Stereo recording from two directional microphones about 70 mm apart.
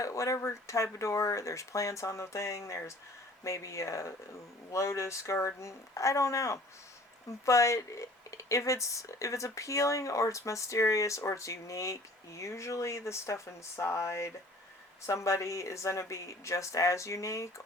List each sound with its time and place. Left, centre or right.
0.0 s speech: left